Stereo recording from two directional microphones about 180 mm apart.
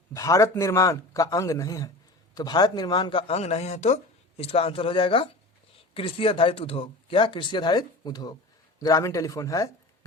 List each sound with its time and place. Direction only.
0.1 s a man's voice: 15° left (ahead or behind)